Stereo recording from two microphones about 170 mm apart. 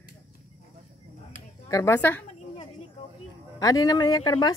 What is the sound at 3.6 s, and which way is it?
Speech, 20° left (ahead or behind).